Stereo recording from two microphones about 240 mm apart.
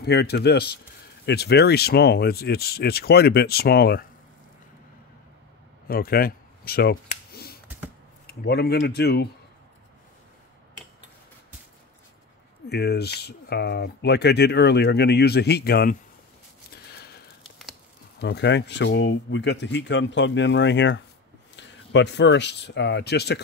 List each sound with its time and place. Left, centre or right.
0.0 s speech: left
5.9 s a sound: left
8.3 s speech: left
12.6 s speech: left
16.7 s sniff: left
18.2 s speech: left